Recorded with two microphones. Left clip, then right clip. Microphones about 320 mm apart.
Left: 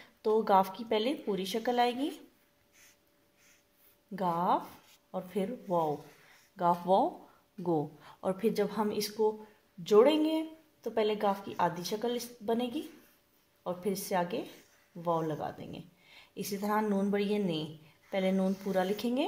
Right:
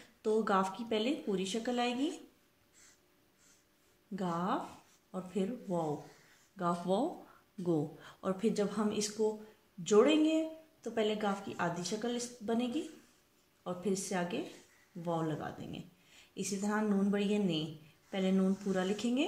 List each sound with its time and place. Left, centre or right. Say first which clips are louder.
0.2 s speech: left 5 dB; centre
4.1 s speech: left 6 dB; centre
6.5 s speech: left 7 dB; centre
13.7 s speech: left 3 dB; centre